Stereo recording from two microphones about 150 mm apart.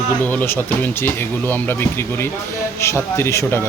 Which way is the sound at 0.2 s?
10° left (ahead or behind).